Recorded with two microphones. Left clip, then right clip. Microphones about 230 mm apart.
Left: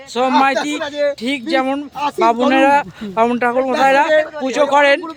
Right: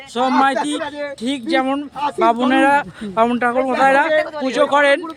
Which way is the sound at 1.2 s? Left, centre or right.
Centre.